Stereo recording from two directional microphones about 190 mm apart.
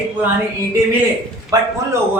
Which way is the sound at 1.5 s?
20° right (ahead or behind).